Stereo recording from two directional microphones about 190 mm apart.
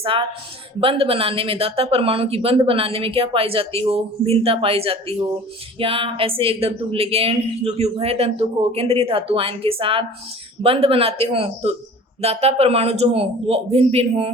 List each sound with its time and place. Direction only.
0.0 s speech: 30° right (ahead or behind)